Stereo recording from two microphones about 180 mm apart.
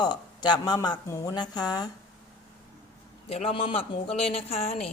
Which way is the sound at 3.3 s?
35° left (ahead or behind).